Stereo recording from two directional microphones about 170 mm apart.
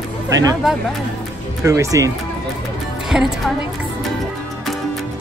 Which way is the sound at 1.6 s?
20° right (ahead or behind).